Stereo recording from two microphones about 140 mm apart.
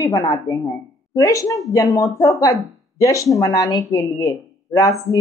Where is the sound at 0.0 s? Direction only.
25° left (ahead or behind).